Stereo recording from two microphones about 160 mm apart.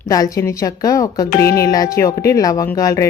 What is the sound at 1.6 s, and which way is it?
Speech, 20° left (ahead or behind).